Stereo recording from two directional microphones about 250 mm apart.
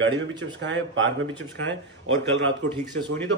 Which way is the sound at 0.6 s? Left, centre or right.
Right.